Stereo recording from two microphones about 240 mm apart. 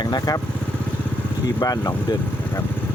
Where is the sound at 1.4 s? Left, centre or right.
Centre.